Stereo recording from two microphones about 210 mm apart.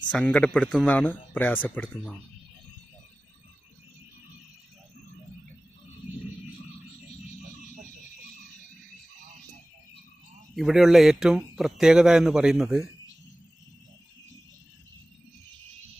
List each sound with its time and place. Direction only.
0.1 s speech: 5° left (ahead or behind)
10.5 s speech: centre (ahead or behind)